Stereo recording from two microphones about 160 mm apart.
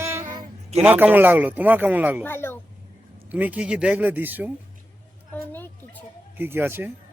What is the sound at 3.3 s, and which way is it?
Speech, 10° right (ahead or behind).